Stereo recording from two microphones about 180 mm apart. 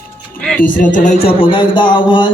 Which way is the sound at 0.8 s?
45° left (ahead or behind).